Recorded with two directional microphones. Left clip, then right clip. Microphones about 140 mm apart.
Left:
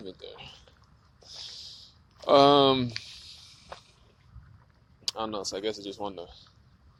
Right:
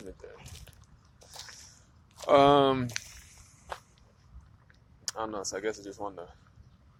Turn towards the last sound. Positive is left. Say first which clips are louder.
# left 3 dB
turn(degrees=45)  # may be behind; listen again after turning